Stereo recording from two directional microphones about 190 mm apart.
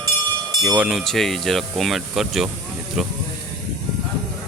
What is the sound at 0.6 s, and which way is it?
Speech, centre (ahead or behind).